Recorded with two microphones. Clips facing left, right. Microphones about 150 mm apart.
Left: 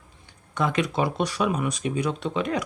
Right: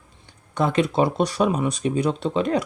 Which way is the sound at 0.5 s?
35° right (ahead or behind).